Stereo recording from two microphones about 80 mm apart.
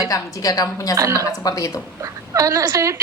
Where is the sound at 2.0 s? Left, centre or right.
Right.